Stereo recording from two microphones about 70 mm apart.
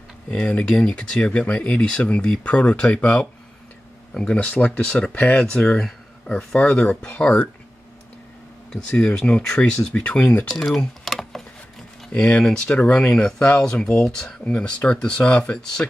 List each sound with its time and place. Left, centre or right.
0.3 s speech: centre
8.9 s speech: centre
10.5 s typing: centre
12.1 s speech: centre